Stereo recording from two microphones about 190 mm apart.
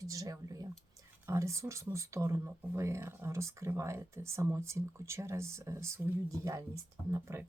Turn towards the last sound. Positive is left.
turn(degrees=-15)  # may be behind; listen again after turning